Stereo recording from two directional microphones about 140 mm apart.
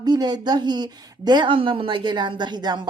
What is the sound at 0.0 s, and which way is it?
A woman's voice, 30° right (ahead or behind).